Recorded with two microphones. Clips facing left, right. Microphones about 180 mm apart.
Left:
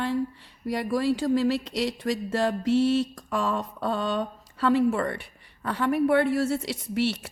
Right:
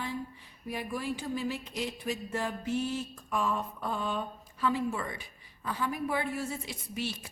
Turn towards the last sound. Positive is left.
turn(degrees=70)  # may be behind; listen again after turning